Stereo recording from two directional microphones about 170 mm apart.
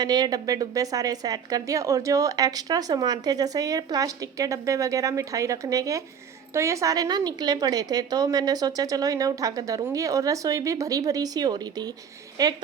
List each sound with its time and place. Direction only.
0.0 s a woman's voice: 25° right (ahead or behind)